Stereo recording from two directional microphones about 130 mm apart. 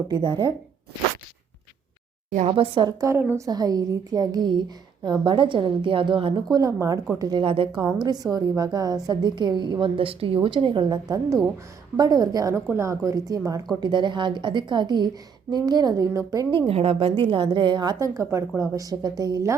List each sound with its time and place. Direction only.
0.1 s speech: 35° right (ahead or behind)
2.5 s speech: 40° right (ahead or behind)
3.0 s a woman's voice: 20° right (ahead or behind); by 6.4 s 40° right (ahead or behind)
6.5 s a woman's voice: 25° right (ahead or behind); by 7.7 s 40° right (ahead or behind)
8.0 s a woman's voice: 30° right (ahead or behind)
16.6 s a woman's voice: 50° right (ahead or behind); by 18.1 s 35° right (ahead or behind)
18.1 s a woman's voice: 20° right (ahead or behind)